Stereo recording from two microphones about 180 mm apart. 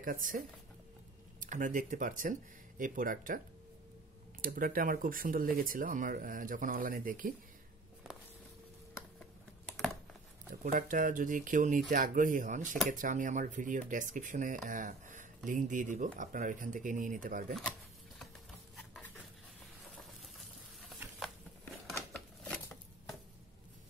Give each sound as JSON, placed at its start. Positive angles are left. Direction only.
{"t": 0.0, "sound": "speech", "side_deg": -50}
{"t": 1.4, "sound": "speech", "side_deg": -45}
{"t": 4.4, "sound": "speech", "side_deg": -50}
{"t": 10.5, "sound": "speech", "side_deg": -50}
{"t": 20.0, "sound": "a sound", "side_deg": 0}
{"t": 21.8, "sound": "a sound", "side_deg": 0}